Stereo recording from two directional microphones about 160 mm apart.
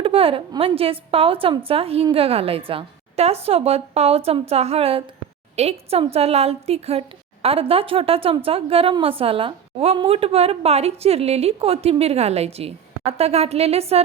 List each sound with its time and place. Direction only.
0.0 s a woman's voice: 35° right (ahead or behind)